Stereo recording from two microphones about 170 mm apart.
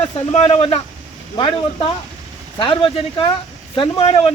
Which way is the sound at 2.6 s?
30° left (ahead or behind).